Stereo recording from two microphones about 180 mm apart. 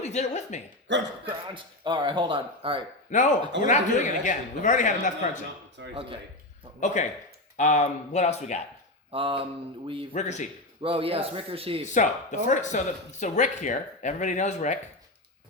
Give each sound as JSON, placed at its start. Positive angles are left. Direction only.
{"t": 0.0, "sound": "speech", "side_deg": 40}
{"t": 0.9, "sound": "speech", "side_deg": -85}
{"t": 1.3, "sound": "a man's voice", "side_deg": -25}
{"t": 3.1, "sound": "speech", "side_deg": 45}
{"t": 5.9, "sound": "a man's voice", "side_deg": -30}
{"t": 6.7, "sound": "speech", "side_deg": 40}
{"t": 9.1, "sound": "a man's voice", "side_deg": -30}
{"t": 10.1, "sound": "speech", "side_deg": 40}
{"t": 10.8, "sound": "speech", "side_deg": -30}
{"t": 11.9, "sound": "speech", "side_deg": 45}